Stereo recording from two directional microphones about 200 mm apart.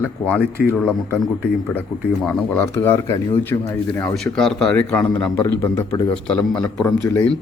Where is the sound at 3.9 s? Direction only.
5° left (ahead or behind).